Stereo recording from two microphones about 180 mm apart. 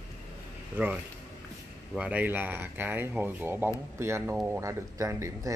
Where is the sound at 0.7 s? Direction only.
10° right (ahead or behind).